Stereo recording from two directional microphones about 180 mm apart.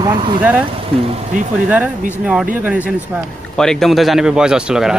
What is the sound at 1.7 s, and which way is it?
Speech, 5° right (ahead or behind).